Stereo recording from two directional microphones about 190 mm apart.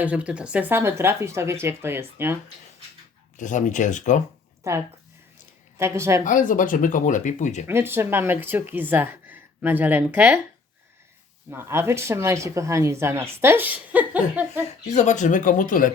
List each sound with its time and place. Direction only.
0.0 s speech: 5° right (ahead or behind)
3.3 s speech: 40° left (ahead or behind)
4.7 s speech: 15° right (ahead or behind)
6.2 s speech: 45° left (ahead or behind)
7.7 s speech: 10° right (ahead or behind)
11.5 s speech: 15° right (ahead or behind)
14.8 s speech: 35° left (ahead or behind)